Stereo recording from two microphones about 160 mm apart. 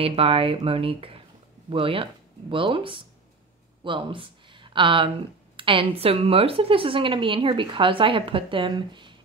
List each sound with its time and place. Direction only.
0.0 s a woman's voice: 35° right (ahead or behind)